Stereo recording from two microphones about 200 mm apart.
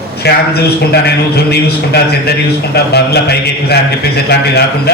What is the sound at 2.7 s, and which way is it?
A man's voice, 55° left (ahead or behind).